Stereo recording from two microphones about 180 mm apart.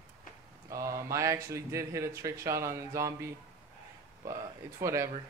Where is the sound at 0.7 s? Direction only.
20° right (ahead or behind).